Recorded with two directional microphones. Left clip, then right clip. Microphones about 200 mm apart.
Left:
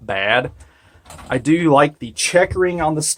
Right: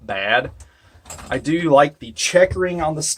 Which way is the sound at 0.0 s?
35° left (ahead or behind).